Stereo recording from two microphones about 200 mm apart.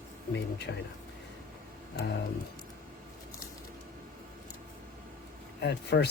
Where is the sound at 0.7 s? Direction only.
60° left (ahead or behind).